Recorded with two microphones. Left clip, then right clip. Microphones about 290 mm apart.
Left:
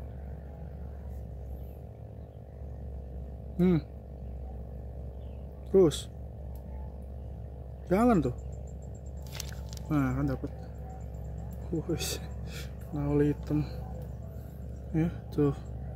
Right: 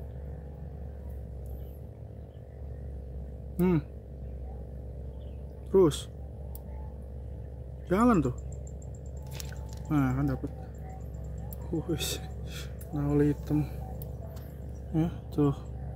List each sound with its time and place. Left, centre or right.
3.5 s speech: centre
5.7 s speech: centre
7.9 s speech: centre
9.8 s speech: centre
11.9 s speech: centre
15.0 s speech: centre